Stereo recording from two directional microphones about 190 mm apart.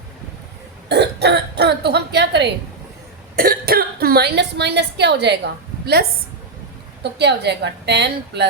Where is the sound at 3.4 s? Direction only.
55° right (ahead or behind).